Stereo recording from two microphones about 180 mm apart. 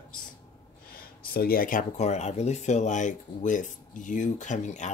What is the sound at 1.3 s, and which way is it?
Speech, 55° left (ahead or behind).